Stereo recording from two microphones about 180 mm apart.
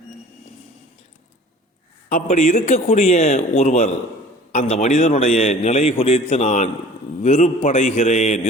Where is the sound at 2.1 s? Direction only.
35° left (ahead or behind).